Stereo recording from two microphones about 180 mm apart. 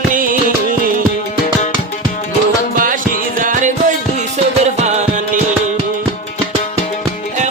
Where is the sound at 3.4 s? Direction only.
50° right (ahead or behind).